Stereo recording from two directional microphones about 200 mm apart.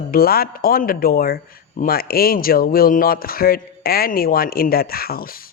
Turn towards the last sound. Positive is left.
turn(degrees=45)  # may be behind; listen again after turning